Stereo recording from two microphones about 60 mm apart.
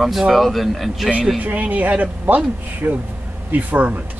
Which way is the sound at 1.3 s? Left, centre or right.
Right.